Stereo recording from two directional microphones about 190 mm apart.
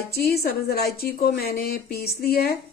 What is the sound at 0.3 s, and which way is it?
Speech, 55° left (ahead or behind).